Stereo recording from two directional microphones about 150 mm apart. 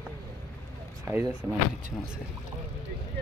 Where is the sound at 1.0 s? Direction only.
15° right (ahead or behind).